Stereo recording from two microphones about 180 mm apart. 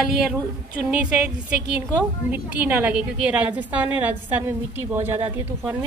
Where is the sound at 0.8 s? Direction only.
5° right (ahead or behind).